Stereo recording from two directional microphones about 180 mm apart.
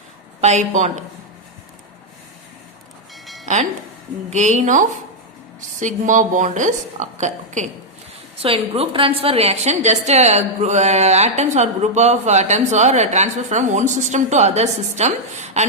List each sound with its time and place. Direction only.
0.4 s a woman's voice: 40° right (ahead or behind)
3.4 s music: 40° right (ahead or behind)
4.3 s a woman's voice: 40° right (ahead or behind)